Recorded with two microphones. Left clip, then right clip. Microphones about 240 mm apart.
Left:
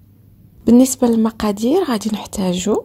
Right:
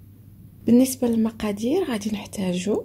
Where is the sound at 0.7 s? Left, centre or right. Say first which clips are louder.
Left 7 dB; left.